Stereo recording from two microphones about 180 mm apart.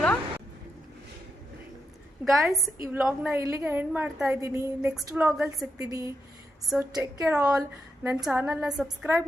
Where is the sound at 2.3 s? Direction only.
Centre (ahead or behind); by 4.9 s 15° right (ahead or behind).